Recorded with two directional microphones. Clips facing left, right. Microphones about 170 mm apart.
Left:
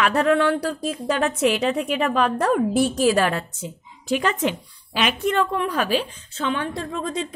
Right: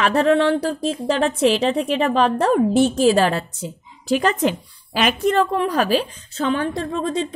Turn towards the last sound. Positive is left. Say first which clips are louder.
# right 4 dB
turn(degrees=-30)  # may be behind; listen again after turning